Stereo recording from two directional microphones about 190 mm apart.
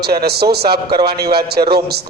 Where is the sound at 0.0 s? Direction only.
55° right (ahead or behind).